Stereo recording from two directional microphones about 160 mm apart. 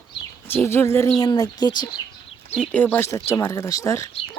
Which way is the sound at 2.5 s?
10° left (ahead or behind).